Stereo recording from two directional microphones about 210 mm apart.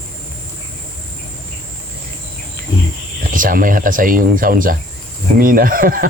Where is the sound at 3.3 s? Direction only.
40° right (ahead or behind).